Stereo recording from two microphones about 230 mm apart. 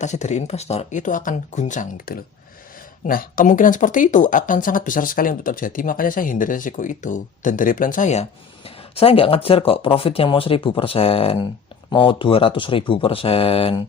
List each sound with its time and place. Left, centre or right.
0.0 s speech: left